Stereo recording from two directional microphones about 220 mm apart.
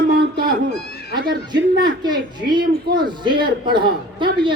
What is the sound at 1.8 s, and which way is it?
A woman's voice, 20° right (ahead or behind).